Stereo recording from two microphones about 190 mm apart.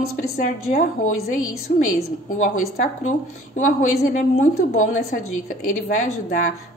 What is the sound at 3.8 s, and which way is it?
A woman's voice, 40° left (ahead or behind).